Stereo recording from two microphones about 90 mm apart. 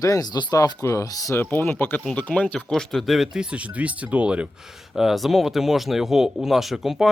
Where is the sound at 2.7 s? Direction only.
Centre (ahead or behind).